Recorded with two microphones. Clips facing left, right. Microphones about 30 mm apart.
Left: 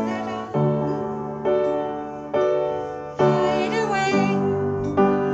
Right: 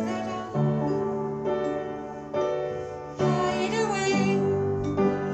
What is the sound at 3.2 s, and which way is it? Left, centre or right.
Music, centre.